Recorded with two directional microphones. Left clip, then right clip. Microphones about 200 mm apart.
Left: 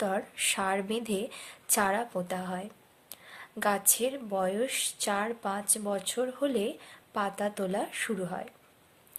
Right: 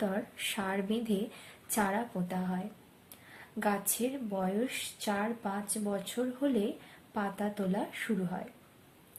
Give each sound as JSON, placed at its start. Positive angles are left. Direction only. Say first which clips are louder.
{"t": 0.0, "sound": "speech", "louder": "left 5 dB", "side_deg": 50}